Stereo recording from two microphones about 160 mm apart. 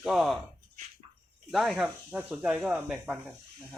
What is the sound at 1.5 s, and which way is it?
Speech, centre (ahead or behind).